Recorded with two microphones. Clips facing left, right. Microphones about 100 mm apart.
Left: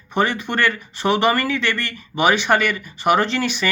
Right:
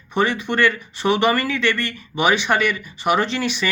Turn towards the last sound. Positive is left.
turn(degrees=40)  # may be behind; listen again after turning